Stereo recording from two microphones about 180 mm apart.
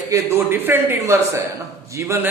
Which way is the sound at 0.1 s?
15° right (ahead or behind).